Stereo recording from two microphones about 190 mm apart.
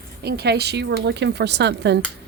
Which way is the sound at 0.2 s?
60° right (ahead or behind).